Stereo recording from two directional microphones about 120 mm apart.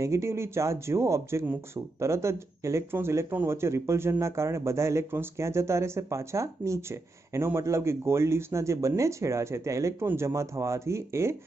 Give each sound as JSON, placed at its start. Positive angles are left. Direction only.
{"t": 0.0, "sound": "speech", "side_deg": -25}